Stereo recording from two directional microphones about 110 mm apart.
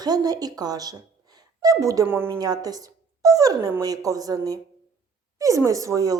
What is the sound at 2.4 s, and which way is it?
A woman's voice, 35° right (ahead or behind).